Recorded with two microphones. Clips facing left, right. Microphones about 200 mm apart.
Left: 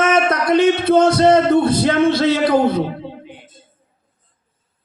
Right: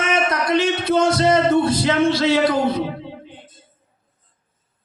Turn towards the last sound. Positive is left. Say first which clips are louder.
# left 2 dB
turn(degrees=55)  # may be behind; listen again after turning